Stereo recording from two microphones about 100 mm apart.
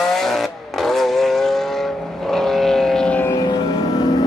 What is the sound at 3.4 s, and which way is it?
Music, 45° left (ahead or behind).